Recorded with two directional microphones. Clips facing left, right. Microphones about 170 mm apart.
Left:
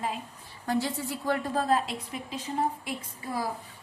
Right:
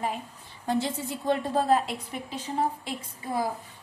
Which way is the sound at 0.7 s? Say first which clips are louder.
Right 1 dB; 20° right (ahead or behind).